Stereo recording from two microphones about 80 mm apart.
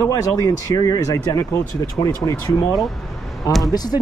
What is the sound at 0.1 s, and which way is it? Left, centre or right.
Speech, left.